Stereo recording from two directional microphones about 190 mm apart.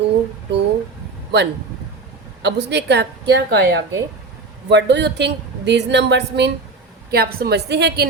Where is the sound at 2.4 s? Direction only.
65° right (ahead or behind).